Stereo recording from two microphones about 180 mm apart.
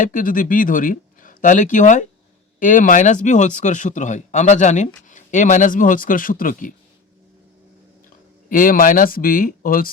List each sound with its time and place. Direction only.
0.0 s speech: 50° left (ahead or behind)
8.4 s speech: 50° left (ahead or behind)